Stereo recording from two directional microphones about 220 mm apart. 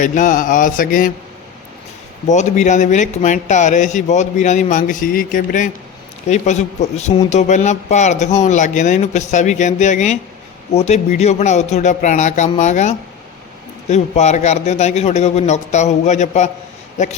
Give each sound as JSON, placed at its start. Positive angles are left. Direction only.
{"t": 0.0, "sound": "a man's voice", "side_deg": 35}
{"t": 2.2, "sound": "a man's voice", "side_deg": 30}